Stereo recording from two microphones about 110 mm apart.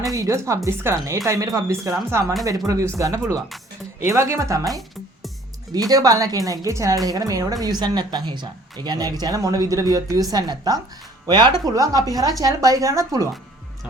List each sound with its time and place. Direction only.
0.1 s speech: 30° right (ahead or behind)
4.6 s music: centre (ahead or behind)
5.9 s speech: 35° right (ahead or behind)